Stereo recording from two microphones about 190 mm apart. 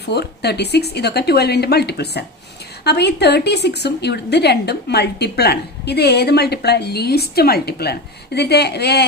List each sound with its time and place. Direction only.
0.0 s a woman's voice: 60° left (ahead or behind)